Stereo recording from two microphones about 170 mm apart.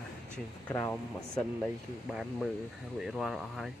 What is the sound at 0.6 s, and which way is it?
Speech, 15° left (ahead or behind).